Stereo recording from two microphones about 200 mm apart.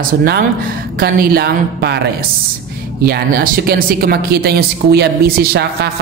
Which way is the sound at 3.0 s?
45° right (ahead or behind).